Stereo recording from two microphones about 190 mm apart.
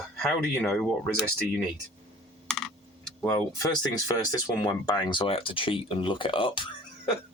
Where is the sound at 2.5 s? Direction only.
5° left (ahead or behind).